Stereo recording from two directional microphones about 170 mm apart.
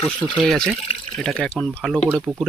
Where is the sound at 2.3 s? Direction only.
25° right (ahead or behind).